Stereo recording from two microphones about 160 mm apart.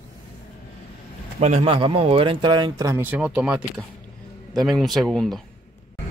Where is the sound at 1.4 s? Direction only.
40° right (ahead or behind); by 3.0 s 25° right (ahead or behind).